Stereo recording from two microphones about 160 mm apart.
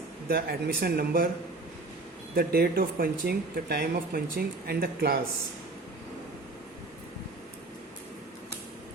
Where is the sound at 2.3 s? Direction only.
70° right (ahead or behind).